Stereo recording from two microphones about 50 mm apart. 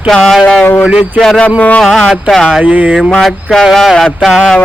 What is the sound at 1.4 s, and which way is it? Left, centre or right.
Speech, left.